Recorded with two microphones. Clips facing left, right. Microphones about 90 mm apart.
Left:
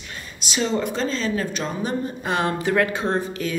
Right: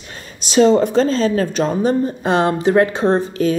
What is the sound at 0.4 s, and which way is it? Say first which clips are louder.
Speech: right 12 dB; 40° right (ahead or behind).